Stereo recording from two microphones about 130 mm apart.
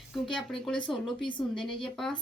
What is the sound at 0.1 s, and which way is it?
A woman's voice, 5° left (ahead or behind).